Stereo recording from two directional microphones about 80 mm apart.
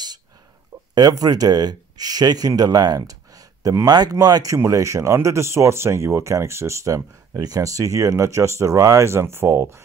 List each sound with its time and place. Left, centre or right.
0.9 s speech: right
4.6 s speech: right